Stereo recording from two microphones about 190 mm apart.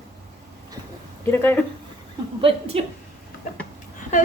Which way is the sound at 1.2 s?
10° left (ahead or behind).